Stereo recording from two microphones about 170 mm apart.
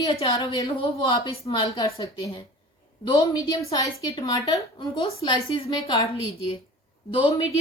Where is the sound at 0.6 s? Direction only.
30° left (ahead or behind).